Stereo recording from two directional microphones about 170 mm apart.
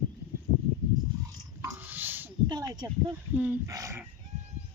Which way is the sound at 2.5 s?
20° right (ahead or behind).